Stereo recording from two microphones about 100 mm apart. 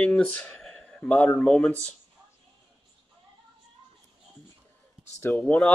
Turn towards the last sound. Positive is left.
turn(degrees=20)  # may be behind; listen again after turning